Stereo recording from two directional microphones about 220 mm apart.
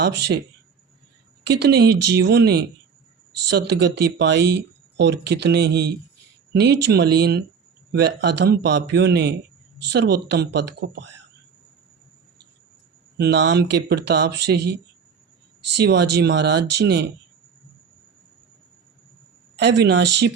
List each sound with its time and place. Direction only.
0.0 s speech: 50° right (ahead or behind)
1.5 s speech: 50° right (ahead or behind)
13.1 s speech: 50° right (ahead or behind)
19.8 s speech: 50° right (ahead or behind)